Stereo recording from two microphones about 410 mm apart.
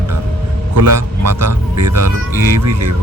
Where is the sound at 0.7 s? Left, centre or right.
Right.